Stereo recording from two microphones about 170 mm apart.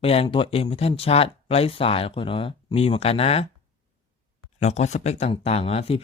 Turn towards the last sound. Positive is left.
turn(degrees=35)  # may be behind; listen again after turning